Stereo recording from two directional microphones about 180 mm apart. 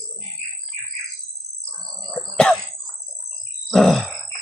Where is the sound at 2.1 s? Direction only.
5° left (ahead or behind).